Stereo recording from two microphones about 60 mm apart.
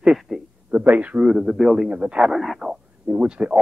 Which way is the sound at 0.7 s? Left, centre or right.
Right.